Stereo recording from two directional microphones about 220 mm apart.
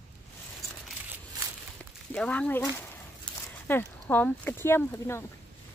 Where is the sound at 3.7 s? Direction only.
10° left (ahead or behind).